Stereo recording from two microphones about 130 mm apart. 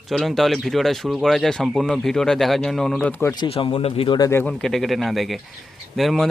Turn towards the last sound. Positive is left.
turn(degrees=0)  # may be behind; listen again after turning